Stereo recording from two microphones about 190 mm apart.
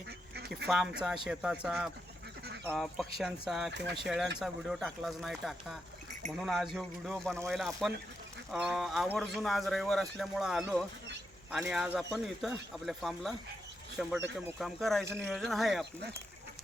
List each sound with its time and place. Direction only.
0.3 s duck: 60° right (ahead or behind)
0.7 s speech: centre (ahead or behind)